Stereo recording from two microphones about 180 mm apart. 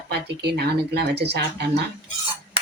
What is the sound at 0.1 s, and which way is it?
Speech, 70° right (ahead or behind).